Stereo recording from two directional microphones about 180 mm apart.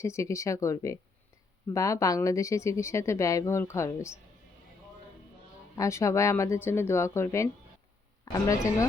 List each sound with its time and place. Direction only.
0.0 s speech: 15° left (ahead or behind)
5.7 s speech: 15° left (ahead or behind)